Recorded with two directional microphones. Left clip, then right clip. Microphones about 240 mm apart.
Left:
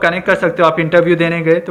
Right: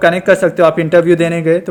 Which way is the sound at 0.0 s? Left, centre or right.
Right.